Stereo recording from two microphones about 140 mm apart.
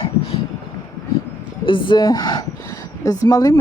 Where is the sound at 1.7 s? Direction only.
35° left (ahead or behind).